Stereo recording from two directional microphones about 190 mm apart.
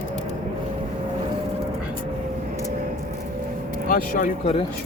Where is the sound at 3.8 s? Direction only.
45° left (ahead or behind).